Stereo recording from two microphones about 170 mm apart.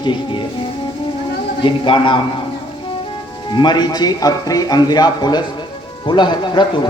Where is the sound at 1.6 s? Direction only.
30° left (ahead or behind).